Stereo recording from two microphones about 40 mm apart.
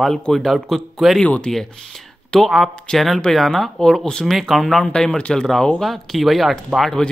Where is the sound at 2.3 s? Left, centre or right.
Centre.